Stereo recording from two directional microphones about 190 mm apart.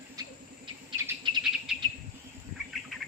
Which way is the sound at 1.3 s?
25° right (ahead or behind).